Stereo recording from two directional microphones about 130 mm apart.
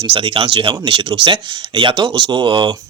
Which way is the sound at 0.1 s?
45° right (ahead or behind).